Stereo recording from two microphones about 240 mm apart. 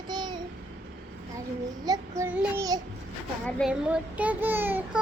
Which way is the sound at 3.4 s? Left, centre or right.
Centre.